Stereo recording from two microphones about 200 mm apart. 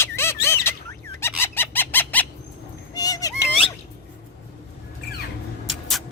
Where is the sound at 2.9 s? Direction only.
20° left (ahead or behind).